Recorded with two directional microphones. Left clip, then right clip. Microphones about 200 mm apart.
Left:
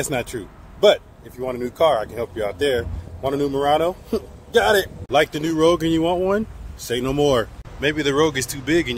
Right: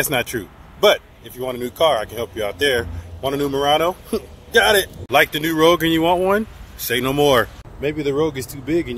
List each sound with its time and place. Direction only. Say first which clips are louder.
0.0 s speech: right 4 dB; 5° right (ahead or behind)